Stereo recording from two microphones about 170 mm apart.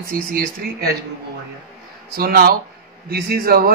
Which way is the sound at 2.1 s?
65° right (ahead or behind).